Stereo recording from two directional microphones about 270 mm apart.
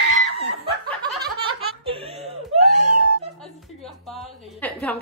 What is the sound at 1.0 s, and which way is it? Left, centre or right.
Laughter, centre.